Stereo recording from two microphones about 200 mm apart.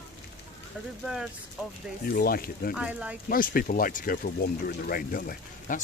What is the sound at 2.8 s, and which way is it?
Speech, 5° right (ahead or behind).